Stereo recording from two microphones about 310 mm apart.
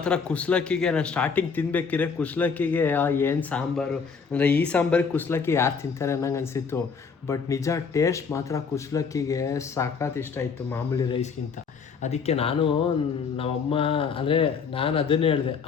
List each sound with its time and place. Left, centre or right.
0.0 s speech: centre